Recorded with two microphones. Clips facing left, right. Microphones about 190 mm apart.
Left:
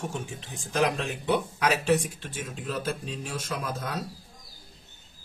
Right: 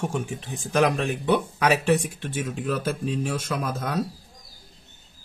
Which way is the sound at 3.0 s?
55° right (ahead or behind).